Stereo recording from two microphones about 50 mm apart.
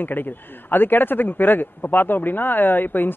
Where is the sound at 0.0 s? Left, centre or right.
Left.